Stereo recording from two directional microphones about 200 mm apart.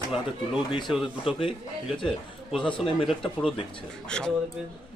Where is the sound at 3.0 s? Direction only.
Centre (ahead or behind).